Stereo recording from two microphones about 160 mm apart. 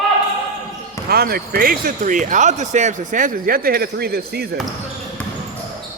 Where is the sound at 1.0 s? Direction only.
75° right (ahead or behind).